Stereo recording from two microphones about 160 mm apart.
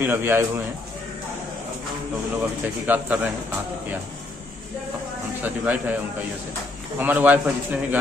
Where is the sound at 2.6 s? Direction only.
10° right (ahead or behind).